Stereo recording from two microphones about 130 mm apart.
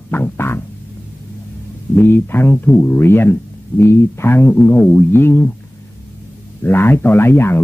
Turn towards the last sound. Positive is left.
turn(degrees=20)  # may be behind; listen again after turning